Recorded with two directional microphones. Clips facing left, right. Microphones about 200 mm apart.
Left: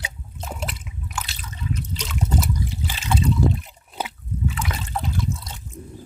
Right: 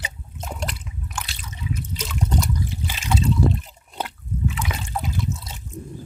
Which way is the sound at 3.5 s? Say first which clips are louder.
Even; centre (ahead or behind).